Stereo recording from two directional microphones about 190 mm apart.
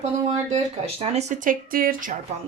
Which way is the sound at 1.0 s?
40° right (ahead or behind).